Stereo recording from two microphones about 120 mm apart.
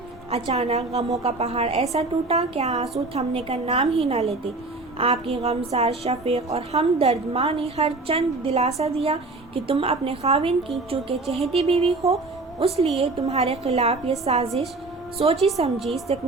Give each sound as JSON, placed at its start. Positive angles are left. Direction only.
{"t": 0.3, "sound": "a woman's voice", "side_deg": -60}
{"t": 11.3, "sound": "music", "side_deg": 0}
{"t": 11.5, "sound": "a woman's voice", "side_deg": -55}